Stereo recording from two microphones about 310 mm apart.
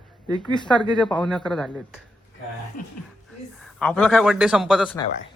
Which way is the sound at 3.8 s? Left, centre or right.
Centre.